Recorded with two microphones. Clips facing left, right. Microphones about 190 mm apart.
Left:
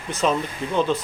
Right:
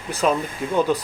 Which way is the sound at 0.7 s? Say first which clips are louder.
Right 2 dB; 10° right (ahead or behind).